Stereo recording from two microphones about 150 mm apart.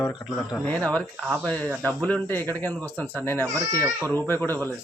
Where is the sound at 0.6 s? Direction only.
10° left (ahead or behind).